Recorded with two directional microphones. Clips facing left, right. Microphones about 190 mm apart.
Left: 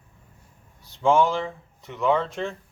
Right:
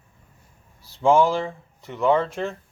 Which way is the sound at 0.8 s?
Centre (ahead or behind).